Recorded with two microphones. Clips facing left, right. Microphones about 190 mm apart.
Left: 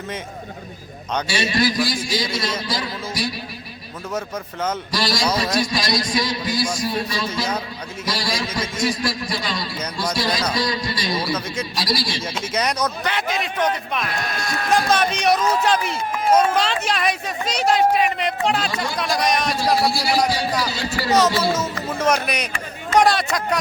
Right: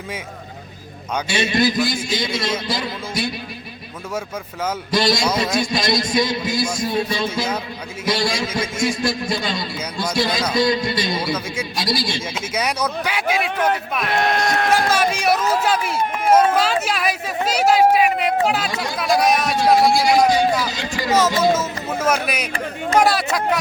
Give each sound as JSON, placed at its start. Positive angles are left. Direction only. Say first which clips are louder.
{"t": 1.3, "sound": "a man's voice", "louder": "right 3 dB", "side_deg": -25}
{"t": 4.9, "sound": "a man's voice", "louder": "right 6 dB", "side_deg": -25}
{"t": 12.3, "sound": "a man's voice", "louder": "even", "side_deg": -5}
{"t": 14.1, "sound": "speech", "louder": "right 7 dB", "side_deg": -60}
{"t": 14.8, "sound": "a man's voice", "louder": "even", "side_deg": -5}
{"t": 20.9, "sound": "a man's voice", "louder": "even", "side_deg": -10}